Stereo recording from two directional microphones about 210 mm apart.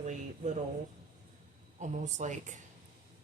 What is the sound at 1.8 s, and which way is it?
Speech, 35° right (ahead or behind).